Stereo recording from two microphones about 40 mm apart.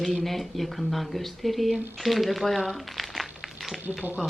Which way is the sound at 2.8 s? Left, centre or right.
Centre.